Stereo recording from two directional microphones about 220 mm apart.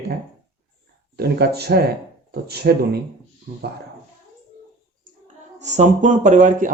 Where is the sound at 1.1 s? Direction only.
45° right (ahead or behind).